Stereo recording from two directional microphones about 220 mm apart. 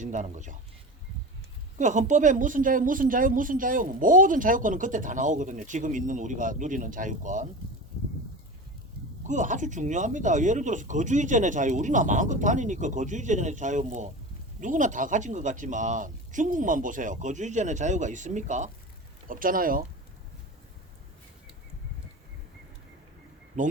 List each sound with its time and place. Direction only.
0.0 s speech: 35° right (ahead or behind)
1.8 s speech: 35° right (ahead or behind)
9.2 s speech: 35° right (ahead or behind)
23.6 s speech: 35° right (ahead or behind)